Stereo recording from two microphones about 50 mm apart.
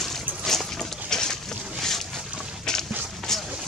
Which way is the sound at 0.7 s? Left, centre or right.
Centre.